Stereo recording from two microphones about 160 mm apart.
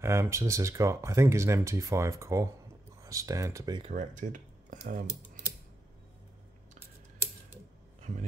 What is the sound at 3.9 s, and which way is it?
Speech, 50° right (ahead or behind).